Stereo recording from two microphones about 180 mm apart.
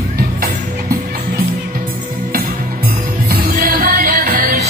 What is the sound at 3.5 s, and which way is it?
Music, 50° right (ahead or behind).